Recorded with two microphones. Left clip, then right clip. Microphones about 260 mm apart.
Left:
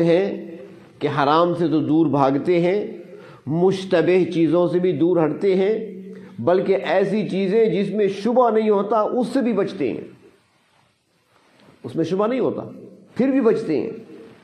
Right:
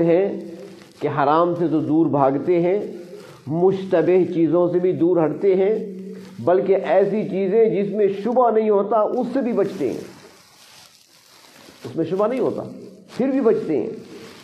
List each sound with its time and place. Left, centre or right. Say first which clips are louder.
0.0 s a man's voice: even; left
11.9 s a man's voice: even; left